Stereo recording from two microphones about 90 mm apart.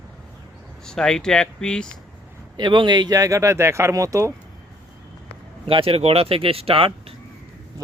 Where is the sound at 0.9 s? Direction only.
5° left (ahead or behind).